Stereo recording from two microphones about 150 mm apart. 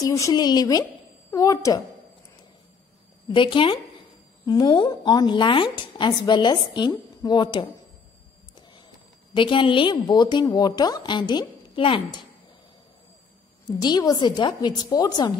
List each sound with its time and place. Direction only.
0.0 s a woman's voice: 20° left (ahead or behind)
3.3 s a woman's voice: 35° left (ahead or behind)
9.3 s a woman's voice: 35° left (ahead or behind)
13.7 s a woman's voice: 25° left (ahead or behind)